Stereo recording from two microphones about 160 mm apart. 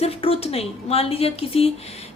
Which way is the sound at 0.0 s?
35° left (ahead or behind).